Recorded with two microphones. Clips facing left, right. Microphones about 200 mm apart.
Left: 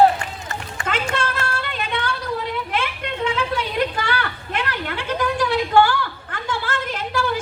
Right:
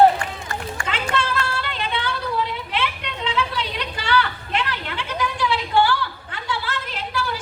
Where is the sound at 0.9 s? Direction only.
50° left (ahead or behind).